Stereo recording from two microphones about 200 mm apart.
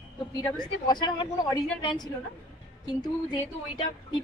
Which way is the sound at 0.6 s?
20° left (ahead or behind).